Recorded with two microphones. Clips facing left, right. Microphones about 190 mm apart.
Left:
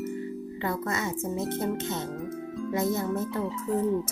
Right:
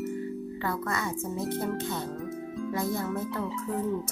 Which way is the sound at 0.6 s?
20° left (ahead or behind).